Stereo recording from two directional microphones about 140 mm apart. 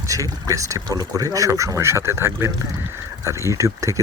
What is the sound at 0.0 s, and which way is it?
Speech, 25° right (ahead or behind).